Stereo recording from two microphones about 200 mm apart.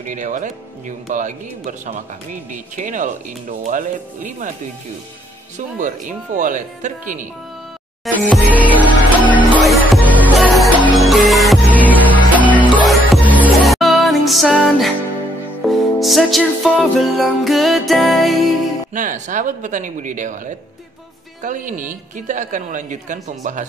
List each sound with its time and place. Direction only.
0.0 s a woman's voice: 40° right (ahead or behind)
5.8 s a woman's voice: 40° right (ahead or behind)
8.0 s music: 5° left (ahead or behind)
8.5 s music: 10° right (ahead or behind)
8.7 s music: 10° left (ahead or behind)
10.4 s music: 5° right (ahead or behind)
12.7 s music: 5° right (ahead or behind)
16.0 s music: centre (ahead or behind)
18.9 s a woman's voice: 40° right (ahead or behind)